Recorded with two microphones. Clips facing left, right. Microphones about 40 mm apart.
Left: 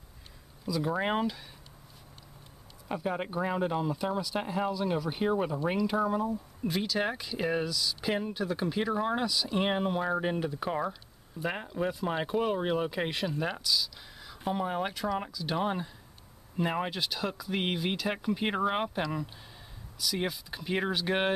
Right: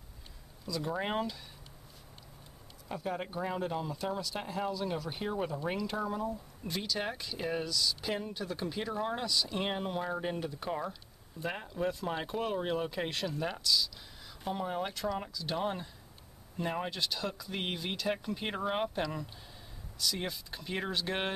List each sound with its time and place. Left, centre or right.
0.7 s speech: centre
2.9 s speech: centre
10.9 s a sound: centre
11.5 s speech: centre
20.2 s speech: centre